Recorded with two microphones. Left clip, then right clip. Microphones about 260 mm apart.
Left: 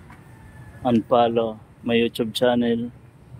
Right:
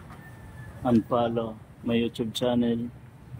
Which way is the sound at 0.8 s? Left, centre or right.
Centre.